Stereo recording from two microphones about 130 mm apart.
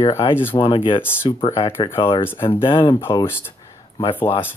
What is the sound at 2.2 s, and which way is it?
Speech, 20° left (ahead or behind).